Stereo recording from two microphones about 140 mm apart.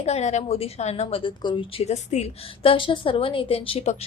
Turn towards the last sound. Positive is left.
turn(degrees=45)  # may be behind; listen again after turning